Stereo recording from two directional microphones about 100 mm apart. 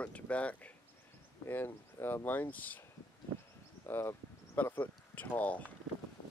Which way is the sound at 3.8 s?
25° left (ahead or behind).